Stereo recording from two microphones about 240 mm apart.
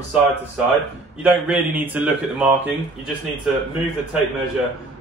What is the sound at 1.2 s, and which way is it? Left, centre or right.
A man's voice, centre.